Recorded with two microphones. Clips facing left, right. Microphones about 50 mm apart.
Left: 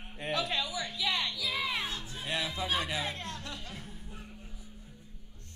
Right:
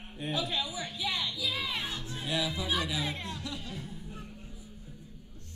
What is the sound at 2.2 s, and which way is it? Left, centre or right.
Music, left.